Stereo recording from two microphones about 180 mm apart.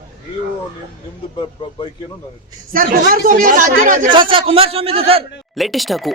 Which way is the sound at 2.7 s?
50° right (ahead or behind).